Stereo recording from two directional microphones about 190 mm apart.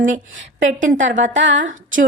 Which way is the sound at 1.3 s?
75° right (ahead or behind).